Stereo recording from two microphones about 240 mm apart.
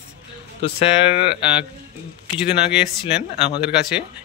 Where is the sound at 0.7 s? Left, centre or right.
Left.